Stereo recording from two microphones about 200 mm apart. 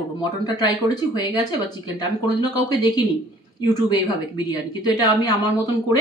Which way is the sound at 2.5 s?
20° left (ahead or behind).